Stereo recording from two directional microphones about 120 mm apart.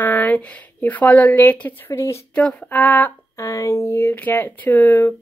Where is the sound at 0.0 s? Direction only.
15° left (ahead or behind).